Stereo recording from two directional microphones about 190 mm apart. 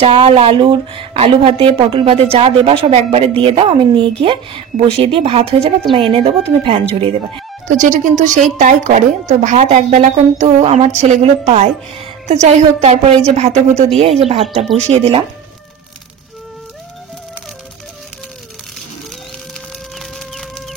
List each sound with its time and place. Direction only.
0.0 s a woman's voice: 30° right (ahead or behind)
20.0 s chicken: centre (ahead or behind)